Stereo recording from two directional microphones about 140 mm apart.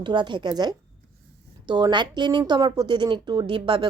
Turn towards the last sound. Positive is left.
turn(degrees=-40)  # may be behind; listen again after turning